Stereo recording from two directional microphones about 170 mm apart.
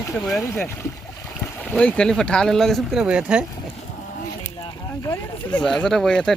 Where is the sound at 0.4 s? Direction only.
15° left (ahead or behind).